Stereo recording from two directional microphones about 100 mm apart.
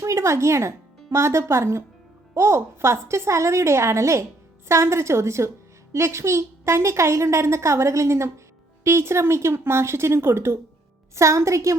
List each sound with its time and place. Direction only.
0.0 s a woman's voice: 30° right (ahead or behind)